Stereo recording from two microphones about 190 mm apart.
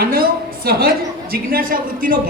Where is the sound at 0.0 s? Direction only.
50° right (ahead or behind).